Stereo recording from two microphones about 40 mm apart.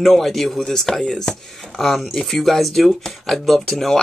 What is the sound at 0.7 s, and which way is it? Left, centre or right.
Speech, centre.